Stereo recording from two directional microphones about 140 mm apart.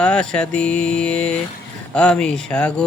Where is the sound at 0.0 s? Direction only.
5° left (ahead or behind).